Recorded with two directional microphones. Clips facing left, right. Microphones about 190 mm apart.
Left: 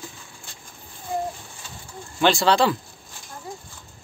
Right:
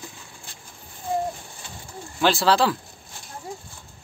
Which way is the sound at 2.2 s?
5° right (ahead or behind).